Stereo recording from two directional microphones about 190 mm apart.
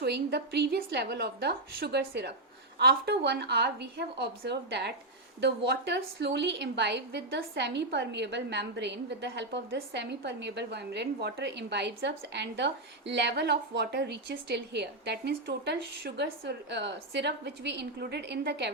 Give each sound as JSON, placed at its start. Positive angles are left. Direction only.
{"t": 0.0, "sound": "a woman's voice", "side_deg": -60}